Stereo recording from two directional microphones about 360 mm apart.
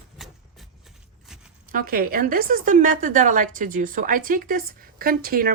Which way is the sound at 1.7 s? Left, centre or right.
Right.